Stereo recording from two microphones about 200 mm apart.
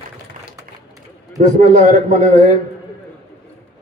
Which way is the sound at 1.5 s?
40° right (ahead or behind).